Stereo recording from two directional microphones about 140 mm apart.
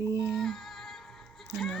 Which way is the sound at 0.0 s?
25° right (ahead or behind).